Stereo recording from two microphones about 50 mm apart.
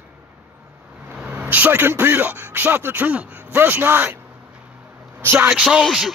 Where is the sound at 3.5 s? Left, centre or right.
Right.